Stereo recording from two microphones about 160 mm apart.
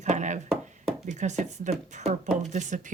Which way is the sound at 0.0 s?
50° right (ahead or behind).